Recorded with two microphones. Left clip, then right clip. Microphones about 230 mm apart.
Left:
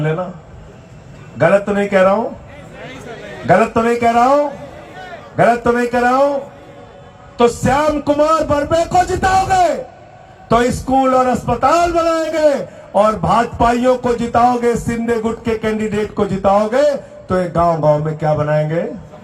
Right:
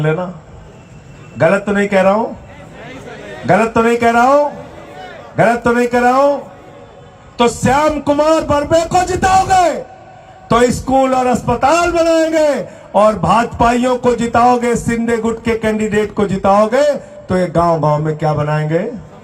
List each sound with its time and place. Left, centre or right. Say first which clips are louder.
0.0 s a man's voice: right 3 dB; right
1.4 s a man's voice: even; right
3.4 s a man's voice: right 1 dB; right
7.3 s a man's voice: right 1 dB; right